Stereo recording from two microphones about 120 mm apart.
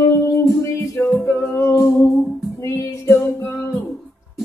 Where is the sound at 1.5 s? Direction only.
20° left (ahead or behind).